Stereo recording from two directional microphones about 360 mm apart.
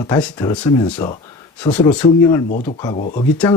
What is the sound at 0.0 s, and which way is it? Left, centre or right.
Speech, centre.